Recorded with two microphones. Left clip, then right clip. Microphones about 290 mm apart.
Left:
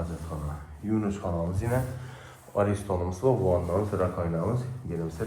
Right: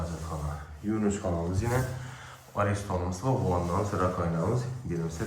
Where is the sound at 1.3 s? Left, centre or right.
Left.